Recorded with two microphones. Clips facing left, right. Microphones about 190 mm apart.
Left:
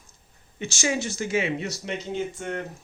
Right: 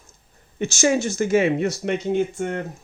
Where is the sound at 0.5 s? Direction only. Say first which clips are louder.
Right 7 dB; 45° right (ahead or behind).